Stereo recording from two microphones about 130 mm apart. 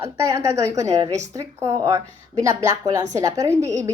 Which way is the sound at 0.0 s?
25° right (ahead or behind).